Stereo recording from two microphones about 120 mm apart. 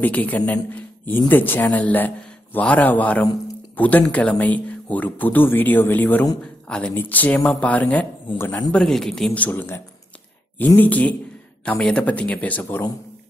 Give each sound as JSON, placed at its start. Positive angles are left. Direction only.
{"t": 0.0, "sound": "a man's voice", "side_deg": 15}
{"t": 8.7, "sound": "speech", "side_deg": 5}
{"t": 10.8, "sound": "speech", "side_deg": 10}